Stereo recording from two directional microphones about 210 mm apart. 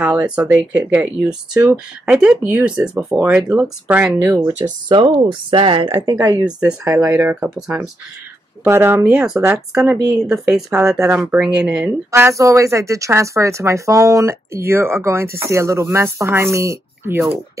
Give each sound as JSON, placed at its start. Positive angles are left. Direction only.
{"t": 0.0, "sound": "speech", "side_deg": -5}
{"t": 4.4, "sound": "speech", "side_deg": -20}